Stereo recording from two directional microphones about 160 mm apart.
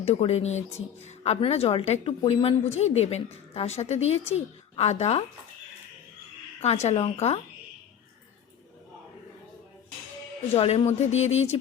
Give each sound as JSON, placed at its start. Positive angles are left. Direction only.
{"t": 0.0, "sound": "a woman's voice", "side_deg": 40}
{"t": 6.6, "sound": "a woman's voice", "side_deg": 45}
{"t": 10.5, "sound": "speech", "side_deg": 40}